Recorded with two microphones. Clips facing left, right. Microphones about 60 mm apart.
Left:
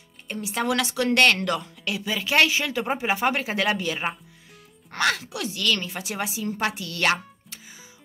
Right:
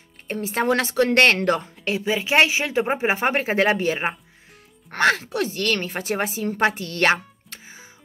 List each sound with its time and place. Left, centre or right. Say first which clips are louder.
0.3 s a woman's voice: right 4 dB; right